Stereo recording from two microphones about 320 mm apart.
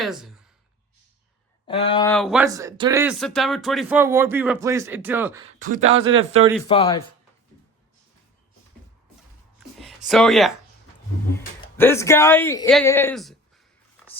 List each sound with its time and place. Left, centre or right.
0.0 s speech: centre
1.6 s speech: centre
2.1 s speech: centre
5.5 s speech: right
6.7 s speech: centre
10.1 s speech: centre